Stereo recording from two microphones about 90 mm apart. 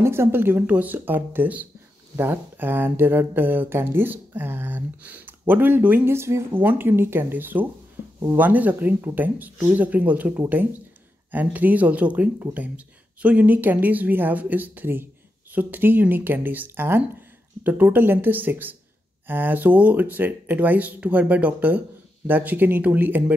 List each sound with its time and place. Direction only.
0.0 s speech: 30° right (ahead or behind)